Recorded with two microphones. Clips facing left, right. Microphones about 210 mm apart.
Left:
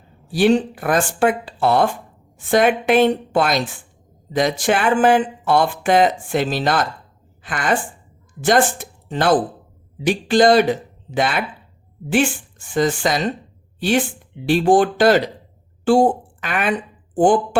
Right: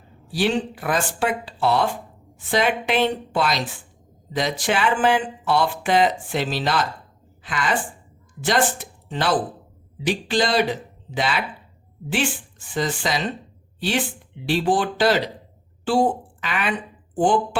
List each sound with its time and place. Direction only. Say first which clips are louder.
0.3 s speech: left 7 dB; 50° left (ahead or behind)
14.4 s speech: left 6 dB; 50° left (ahead or behind)